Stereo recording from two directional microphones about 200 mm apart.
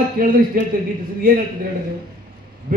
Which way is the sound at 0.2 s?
45° right (ahead or behind).